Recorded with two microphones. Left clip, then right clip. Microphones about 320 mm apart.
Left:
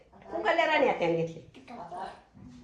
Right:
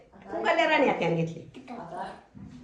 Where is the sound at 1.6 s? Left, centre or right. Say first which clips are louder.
Right 2 dB; centre.